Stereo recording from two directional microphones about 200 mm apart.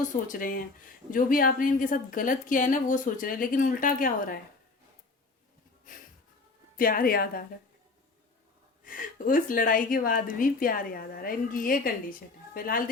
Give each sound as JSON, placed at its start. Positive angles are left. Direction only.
{"t": 0.0, "sound": "a woman's voice", "side_deg": 40}
{"t": 5.9, "sound": "a woman's voice", "side_deg": 40}
{"t": 8.8, "sound": "a woman's voice", "side_deg": 45}